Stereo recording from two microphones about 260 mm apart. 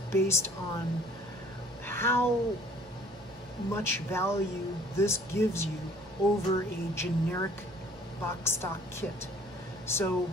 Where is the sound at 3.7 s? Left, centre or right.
Centre.